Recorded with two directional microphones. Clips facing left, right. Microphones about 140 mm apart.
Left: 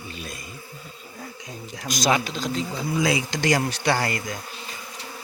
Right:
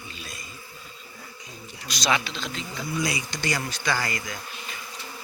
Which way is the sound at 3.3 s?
90° left.